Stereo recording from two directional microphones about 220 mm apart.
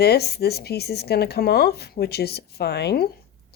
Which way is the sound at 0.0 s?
45° left (ahead or behind).